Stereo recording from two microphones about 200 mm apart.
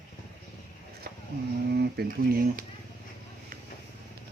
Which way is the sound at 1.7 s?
55° right (ahead or behind).